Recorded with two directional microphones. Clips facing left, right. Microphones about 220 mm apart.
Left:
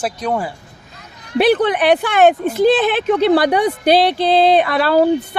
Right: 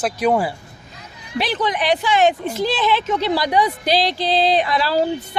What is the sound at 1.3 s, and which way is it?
Speech, 60° left (ahead or behind).